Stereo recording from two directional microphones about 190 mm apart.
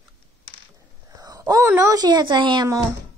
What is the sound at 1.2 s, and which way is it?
Speech, 20° right (ahead or behind).